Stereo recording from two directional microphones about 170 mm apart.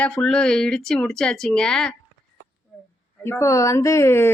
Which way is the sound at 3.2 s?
15° left (ahead or behind).